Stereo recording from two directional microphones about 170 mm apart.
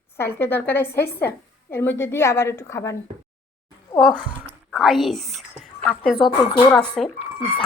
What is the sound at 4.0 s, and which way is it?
A woman's voice, centre (ahead or behind).